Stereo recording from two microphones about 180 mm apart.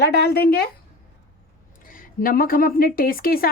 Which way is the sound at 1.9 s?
50° left (ahead or behind).